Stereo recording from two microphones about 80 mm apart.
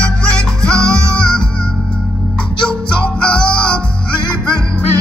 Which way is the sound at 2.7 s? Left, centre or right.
Centre.